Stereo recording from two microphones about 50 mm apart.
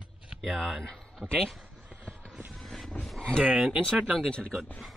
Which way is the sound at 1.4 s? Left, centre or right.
Centre.